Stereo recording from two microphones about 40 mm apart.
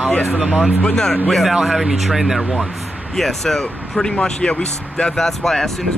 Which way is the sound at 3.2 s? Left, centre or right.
Centre.